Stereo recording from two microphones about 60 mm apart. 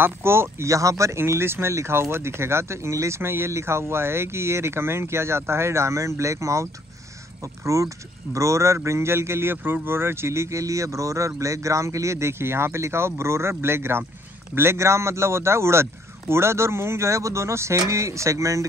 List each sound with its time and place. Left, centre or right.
0.0 s a man's voice: right
0.7 s speech: right
1.2 s a man's voice: right
3.2 s a man's voice: right